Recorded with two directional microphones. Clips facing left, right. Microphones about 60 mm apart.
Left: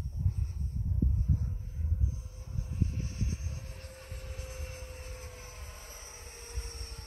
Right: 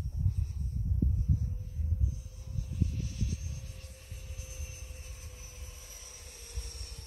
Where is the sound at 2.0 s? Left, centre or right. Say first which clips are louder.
Left 1 dB; left.